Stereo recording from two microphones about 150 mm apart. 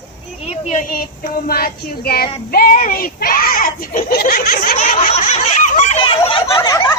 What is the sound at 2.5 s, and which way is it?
A child's voice, 75° left (ahead or behind).